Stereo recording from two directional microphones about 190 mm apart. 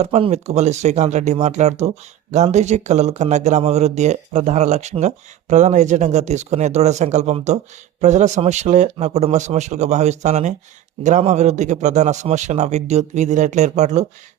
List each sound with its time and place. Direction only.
0.0 s speech: 35° right (ahead or behind)